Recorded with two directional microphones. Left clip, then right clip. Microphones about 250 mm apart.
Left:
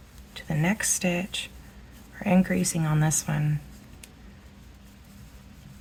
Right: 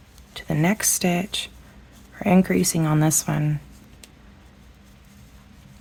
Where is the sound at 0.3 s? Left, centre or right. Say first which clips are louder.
Right 5 dB; right.